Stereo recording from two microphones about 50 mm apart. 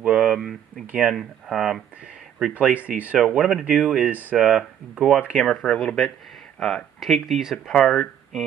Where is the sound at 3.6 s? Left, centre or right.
Right.